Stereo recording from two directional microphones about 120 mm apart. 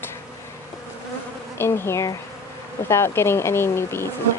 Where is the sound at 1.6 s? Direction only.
20° left (ahead or behind).